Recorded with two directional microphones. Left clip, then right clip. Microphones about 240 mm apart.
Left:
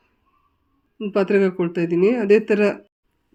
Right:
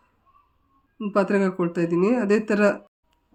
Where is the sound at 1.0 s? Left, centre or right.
Centre.